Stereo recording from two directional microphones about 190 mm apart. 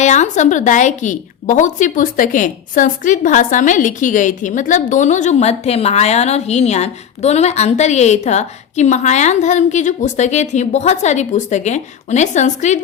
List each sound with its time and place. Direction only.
0.0 s a woman's voice: 40° left (ahead or behind)